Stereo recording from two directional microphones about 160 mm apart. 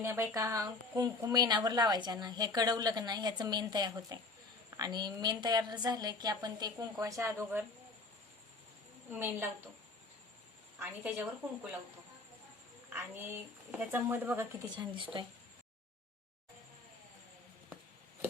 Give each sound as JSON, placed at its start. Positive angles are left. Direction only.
{"t": 0.0, "sound": "a woman's voice", "side_deg": -15}
{"t": 9.0, "sound": "speech", "side_deg": -15}
{"t": 10.8, "sound": "speech", "side_deg": -10}
{"t": 12.9, "sound": "speech", "side_deg": -15}
{"t": 14.8, "sound": "speech", "side_deg": -30}